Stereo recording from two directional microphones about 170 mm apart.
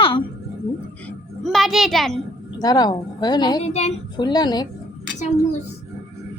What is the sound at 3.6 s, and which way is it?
Speech, 40° left (ahead or behind).